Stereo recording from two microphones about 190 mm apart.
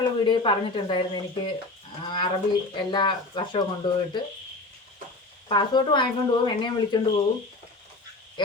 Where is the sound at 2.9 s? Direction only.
25° left (ahead or behind).